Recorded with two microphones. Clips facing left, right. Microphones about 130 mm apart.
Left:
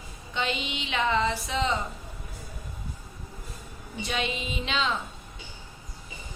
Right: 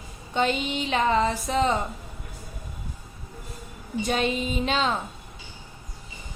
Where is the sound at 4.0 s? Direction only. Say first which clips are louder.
Right 6 dB; 45° right (ahead or behind).